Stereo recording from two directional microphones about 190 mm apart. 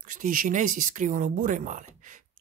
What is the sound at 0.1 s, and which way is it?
Speech, 45° right (ahead or behind).